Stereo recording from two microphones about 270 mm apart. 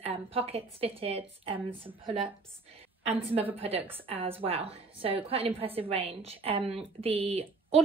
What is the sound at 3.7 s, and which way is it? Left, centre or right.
Speech, centre.